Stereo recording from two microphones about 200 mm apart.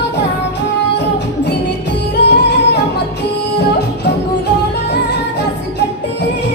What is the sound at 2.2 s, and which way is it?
Music, 60° left (ahead or behind).